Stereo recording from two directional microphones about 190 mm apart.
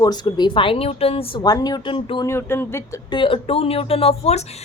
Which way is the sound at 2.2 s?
15° left (ahead or behind).